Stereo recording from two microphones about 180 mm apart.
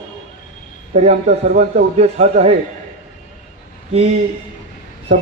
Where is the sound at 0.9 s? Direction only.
40° right (ahead or behind).